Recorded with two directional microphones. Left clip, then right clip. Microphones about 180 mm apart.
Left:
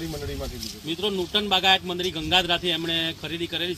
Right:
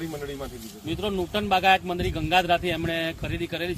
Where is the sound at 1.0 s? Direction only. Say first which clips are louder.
Left 3 dB; 35° right (ahead or behind).